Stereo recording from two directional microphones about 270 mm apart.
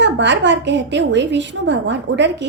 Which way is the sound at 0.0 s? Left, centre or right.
Right.